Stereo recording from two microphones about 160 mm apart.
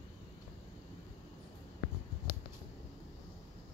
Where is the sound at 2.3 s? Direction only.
65° left (ahead or behind).